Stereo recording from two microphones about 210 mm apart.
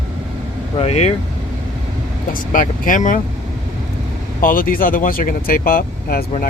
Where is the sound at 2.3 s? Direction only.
40° left (ahead or behind).